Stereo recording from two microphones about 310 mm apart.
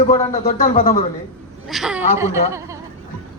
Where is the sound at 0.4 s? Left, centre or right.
Left.